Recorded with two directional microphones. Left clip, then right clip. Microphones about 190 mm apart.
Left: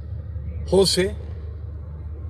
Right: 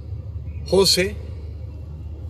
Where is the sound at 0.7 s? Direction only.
25° left (ahead or behind).